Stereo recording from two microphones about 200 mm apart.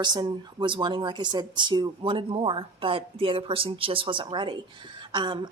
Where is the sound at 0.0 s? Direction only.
20° right (ahead or behind).